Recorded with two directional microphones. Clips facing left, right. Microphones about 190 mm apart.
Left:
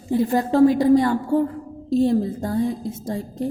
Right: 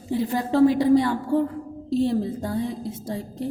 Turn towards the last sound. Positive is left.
turn(degrees=45)  # may be behind; listen again after turning